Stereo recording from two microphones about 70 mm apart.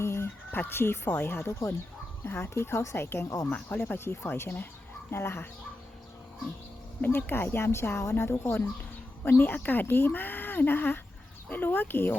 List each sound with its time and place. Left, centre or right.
0.0 s speech: left
3.5 s speech: left
7.0 s speech: left